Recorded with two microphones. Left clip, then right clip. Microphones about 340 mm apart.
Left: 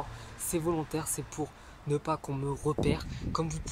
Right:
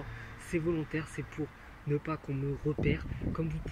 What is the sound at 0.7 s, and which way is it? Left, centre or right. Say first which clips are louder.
Speech: left 2 dB; left.